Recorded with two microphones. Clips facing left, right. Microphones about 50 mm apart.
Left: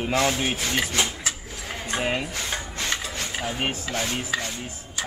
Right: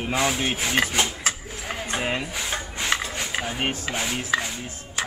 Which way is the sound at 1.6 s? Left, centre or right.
Centre.